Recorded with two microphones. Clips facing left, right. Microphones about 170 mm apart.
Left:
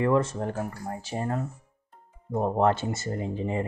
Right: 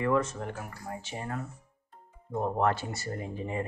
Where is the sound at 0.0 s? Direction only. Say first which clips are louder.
Left 4 dB; 30° left (ahead or behind).